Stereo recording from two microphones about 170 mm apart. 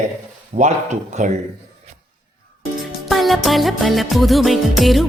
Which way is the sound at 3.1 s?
Centre (ahead or behind).